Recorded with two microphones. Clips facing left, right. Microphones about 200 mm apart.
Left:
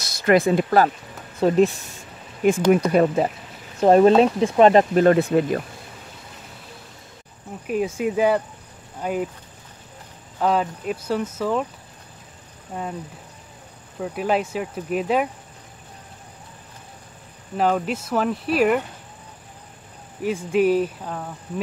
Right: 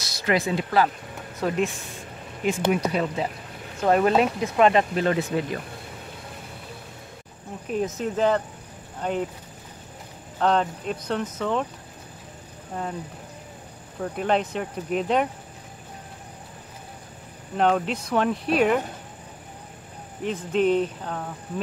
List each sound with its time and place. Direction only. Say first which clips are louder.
0.0 s speech: left 7 dB; 50° left (ahead or behind)
1.4 s speech: left 7 dB; 30° left (ahead or behind)
2.4 s speech: left 6 dB; 50° left (ahead or behind)
3.8 s speech: left 6 dB; 30° left (ahead or behind); by 5.6 s 50° left (ahead or behind)
7.6 s speech: left 3 dB; 10° left (ahead or behind)
10.4 s speech: left 1 dB; 5° left (ahead or behind)
12.7 s speech: left 1 dB; 5° left (ahead or behind)
14.0 s speech: left 1 dB; 5° left (ahead or behind)
17.6 s speech: left 1 dB; 5° left (ahead or behind)
20.2 s speech: left 3 dB; 10° left (ahead or behind)